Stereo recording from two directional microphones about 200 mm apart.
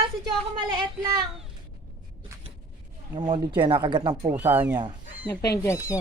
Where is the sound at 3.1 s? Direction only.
20° right (ahead or behind).